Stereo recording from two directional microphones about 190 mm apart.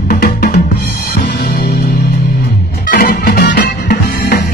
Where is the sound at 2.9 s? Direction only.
50° left (ahead or behind).